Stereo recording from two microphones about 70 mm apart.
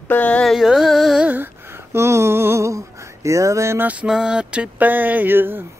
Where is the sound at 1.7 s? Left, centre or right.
Right.